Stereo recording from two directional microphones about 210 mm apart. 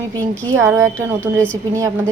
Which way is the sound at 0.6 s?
10° right (ahead or behind).